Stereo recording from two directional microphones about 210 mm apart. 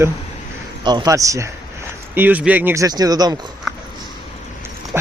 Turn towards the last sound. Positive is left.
turn(degrees=-10)  # may be behind; listen again after turning